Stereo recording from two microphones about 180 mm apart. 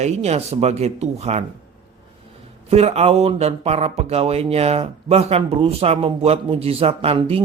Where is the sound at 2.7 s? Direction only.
35° right (ahead or behind).